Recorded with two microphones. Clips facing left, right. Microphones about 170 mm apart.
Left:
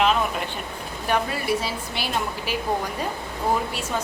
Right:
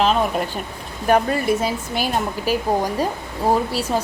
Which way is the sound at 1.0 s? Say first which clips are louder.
Right 7 dB; 45° right (ahead or behind).